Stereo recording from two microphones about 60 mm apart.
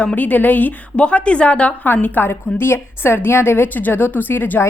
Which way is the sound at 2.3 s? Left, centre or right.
Left.